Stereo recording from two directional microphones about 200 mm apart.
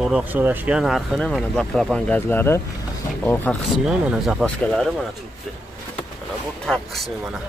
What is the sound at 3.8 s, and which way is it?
Speech, 5° right (ahead or behind).